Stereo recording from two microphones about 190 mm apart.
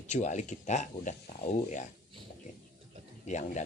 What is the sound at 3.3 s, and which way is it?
Speech, 40° left (ahead or behind).